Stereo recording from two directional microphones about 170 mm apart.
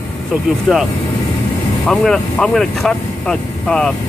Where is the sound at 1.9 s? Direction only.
5° left (ahead or behind).